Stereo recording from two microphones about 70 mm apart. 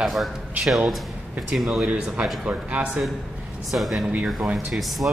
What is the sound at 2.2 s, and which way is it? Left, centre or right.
Speech, centre.